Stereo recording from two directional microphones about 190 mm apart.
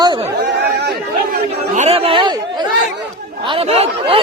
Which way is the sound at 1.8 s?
30° right (ahead or behind).